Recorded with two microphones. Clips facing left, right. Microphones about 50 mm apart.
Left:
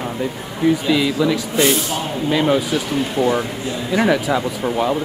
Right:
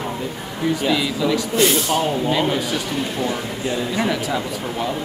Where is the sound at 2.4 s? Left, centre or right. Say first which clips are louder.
Left 4 dB; centre.